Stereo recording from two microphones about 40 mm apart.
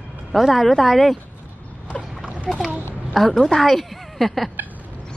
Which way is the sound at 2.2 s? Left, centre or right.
Right.